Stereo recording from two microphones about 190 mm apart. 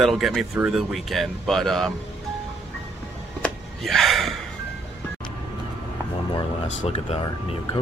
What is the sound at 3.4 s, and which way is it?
Gasp, centre (ahead or behind).